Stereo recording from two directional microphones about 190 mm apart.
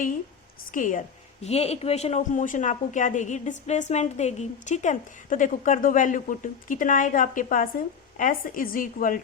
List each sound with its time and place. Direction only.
0.7 s a woman's voice: 45° left (ahead or behind)